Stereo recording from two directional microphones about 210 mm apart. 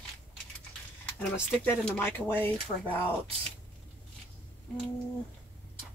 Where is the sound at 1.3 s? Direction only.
5° left (ahead or behind).